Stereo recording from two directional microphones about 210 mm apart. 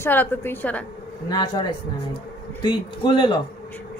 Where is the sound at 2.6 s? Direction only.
20° left (ahead or behind).